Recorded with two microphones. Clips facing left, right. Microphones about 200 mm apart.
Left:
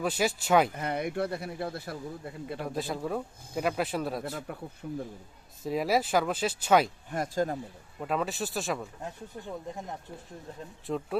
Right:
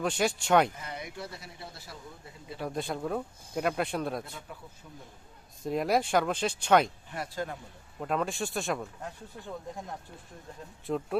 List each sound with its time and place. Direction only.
0.0 s speech: 5° left (ahead or behind)
0.8 s speech: 55° left (ahead or behind)
2.6 s speech: centre (ahead or behind)
4.5 s speech: 60° left (ahead or behind)
5.6 s speech: centre (ahead or behind)
7.1 s speech: 45° left (ahead or behind)
7.9 s speech: centre (ahead or behind)
10.8 s speech: centre (ahead or behind)